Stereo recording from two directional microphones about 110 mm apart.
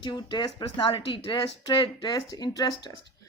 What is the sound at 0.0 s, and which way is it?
Speech, 45° left (ahead or behind).